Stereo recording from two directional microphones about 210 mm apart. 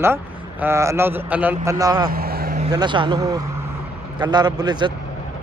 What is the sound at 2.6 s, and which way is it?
A man's voice, 20° right (ahead or behind).